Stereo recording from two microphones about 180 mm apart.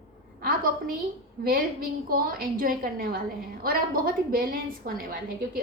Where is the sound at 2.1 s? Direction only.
55° right (ahead or behind).